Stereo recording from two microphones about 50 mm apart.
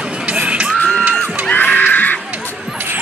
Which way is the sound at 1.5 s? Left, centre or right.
Left.